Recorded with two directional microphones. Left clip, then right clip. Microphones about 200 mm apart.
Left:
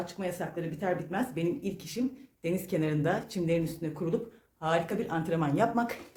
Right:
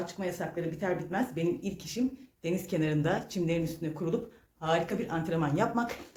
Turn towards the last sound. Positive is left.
turn(degrees=15)  # may be behind; listen again after turning